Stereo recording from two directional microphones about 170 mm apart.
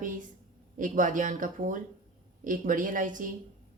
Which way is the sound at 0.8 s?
50° right (ahead or behind).